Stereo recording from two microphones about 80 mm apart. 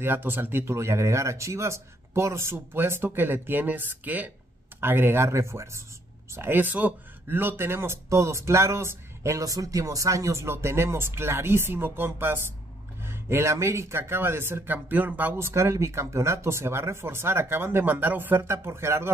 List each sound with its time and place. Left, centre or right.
0.0 s speech: right